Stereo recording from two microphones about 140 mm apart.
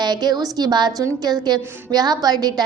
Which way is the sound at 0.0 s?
30° right (ahead or behind).